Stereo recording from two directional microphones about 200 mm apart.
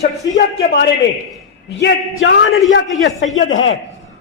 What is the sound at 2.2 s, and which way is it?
A man's voice, 70° left (ahead or behind).